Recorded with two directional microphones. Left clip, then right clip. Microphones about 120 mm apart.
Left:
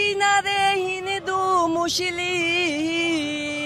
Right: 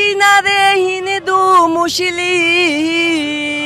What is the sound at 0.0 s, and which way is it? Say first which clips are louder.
Music: right 9 dB; 45° right (ahead or behind).